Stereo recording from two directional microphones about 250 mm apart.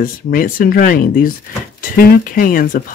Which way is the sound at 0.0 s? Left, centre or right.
Left.